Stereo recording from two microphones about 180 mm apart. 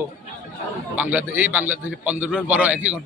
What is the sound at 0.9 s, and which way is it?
A man's voice, 10° right (ahead or behind).